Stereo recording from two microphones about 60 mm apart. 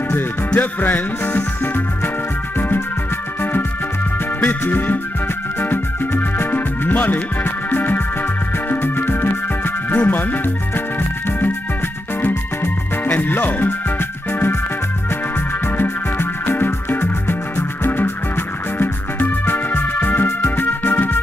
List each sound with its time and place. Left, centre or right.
0.6 s music: left
4.4 s music: left
13.0 s music: left
15.8 s music: left